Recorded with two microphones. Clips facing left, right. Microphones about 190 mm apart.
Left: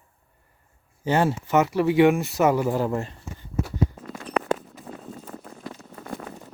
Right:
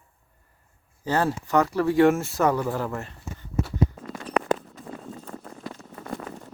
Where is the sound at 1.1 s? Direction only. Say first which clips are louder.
Left 2 dB; 25° left (ahead or behind).